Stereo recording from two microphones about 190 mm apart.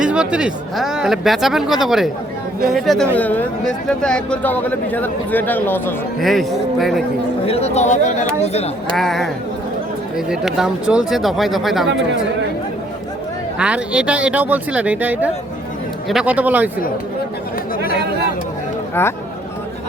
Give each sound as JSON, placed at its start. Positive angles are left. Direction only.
{"t": 0.0, "sound": "speech", "side_deg": -5}
{"t": 7.4, "sound": "speech", "side_deg": 30}
{"t": 9.0, "sound": "speech", "side_deg": 0}
{"t": 13.6, "sound": "speech", "side_deg": -5}